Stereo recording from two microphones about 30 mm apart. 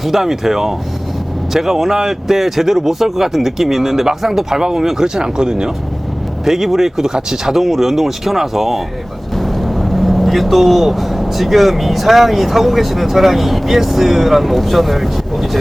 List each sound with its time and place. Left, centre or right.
0.0 s speech: centre
5.0 s speech: right
6.4 s speech: centre
7.5 s speech: centre
9.3 s speech: centre